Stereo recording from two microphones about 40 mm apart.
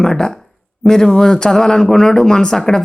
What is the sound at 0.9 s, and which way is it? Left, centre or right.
Speech, centre.